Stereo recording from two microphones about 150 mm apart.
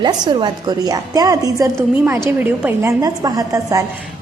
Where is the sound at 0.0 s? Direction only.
30° right (ahead or behind).